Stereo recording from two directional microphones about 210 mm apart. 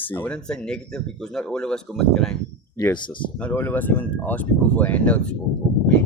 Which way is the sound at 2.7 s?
20° left (ahead or behind).